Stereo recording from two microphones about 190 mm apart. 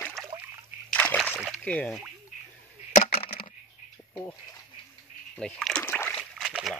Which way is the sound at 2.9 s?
40° left (ahead or behind).